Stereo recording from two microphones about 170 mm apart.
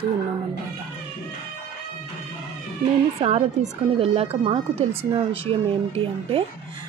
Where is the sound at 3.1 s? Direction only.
35° right (ahead or behind).